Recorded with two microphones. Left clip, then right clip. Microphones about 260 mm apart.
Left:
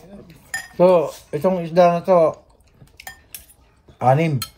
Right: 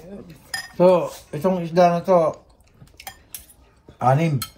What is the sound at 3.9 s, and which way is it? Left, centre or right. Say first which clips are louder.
Speech: left 2 dB; left.